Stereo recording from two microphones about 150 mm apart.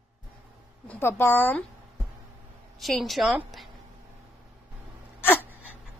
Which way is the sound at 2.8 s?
Centre (ahead or behind).